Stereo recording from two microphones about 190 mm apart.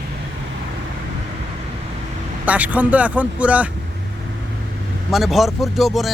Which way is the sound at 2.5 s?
10° right (ahead or behind).